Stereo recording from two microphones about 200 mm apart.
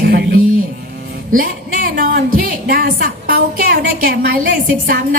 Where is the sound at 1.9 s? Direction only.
45° right (ahead or behind).